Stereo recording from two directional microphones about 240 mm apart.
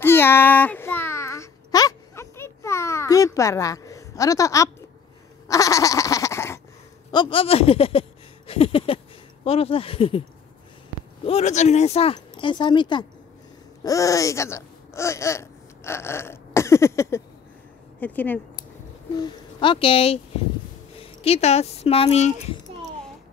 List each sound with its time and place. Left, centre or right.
0.0 s a sound: centre
5.5 s goat: centre
7.1 s speech: centre
11.2 s speech: left; by 18.4 s centre
19.1 s speech: centre